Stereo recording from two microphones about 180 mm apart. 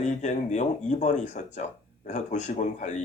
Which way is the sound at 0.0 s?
40° left (ahead or behind).